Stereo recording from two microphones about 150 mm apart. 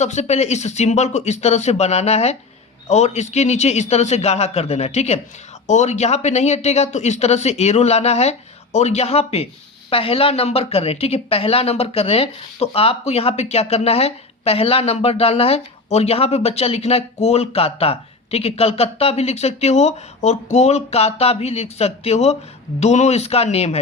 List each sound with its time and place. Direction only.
0.0 s a woman's voice: 50° left (ahead or behind)